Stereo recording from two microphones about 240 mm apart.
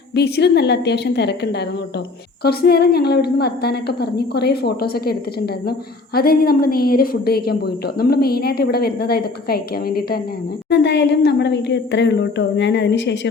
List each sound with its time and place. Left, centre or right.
0.1 s a woman's voice: left
6.1 s a woman's voice: left